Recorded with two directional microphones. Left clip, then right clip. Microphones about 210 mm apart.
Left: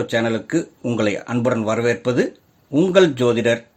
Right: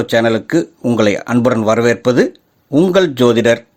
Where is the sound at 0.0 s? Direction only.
35° right (ahead or behind).